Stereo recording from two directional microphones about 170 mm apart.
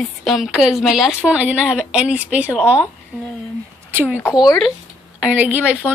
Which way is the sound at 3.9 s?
15° right (ahead or behind).